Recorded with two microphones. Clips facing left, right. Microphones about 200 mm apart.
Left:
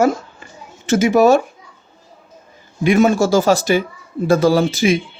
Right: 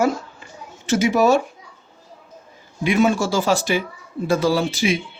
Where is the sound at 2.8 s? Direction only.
45° left (ahead or behind).